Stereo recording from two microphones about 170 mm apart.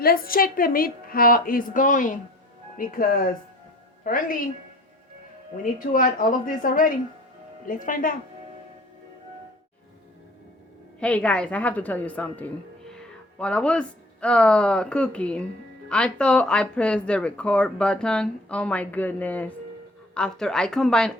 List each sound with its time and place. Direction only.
0.0 s a woman's voice: 60° left (ahead or behind)
5.8 s a woman's voice: 55° left (ahead or behind)
11.0 s a woman's voice: 5° left (ahead or behind)